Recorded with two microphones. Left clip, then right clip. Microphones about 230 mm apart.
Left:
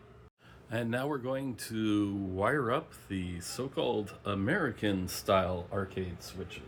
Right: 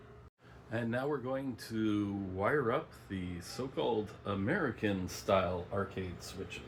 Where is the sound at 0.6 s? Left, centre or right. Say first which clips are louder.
Left 2 dB; left.